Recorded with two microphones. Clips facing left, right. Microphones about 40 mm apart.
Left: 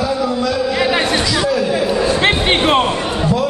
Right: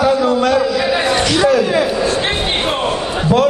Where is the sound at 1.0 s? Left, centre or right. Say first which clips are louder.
Right 3 dB; right.